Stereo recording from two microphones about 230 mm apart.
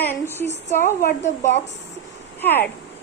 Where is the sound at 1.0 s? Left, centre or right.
Left.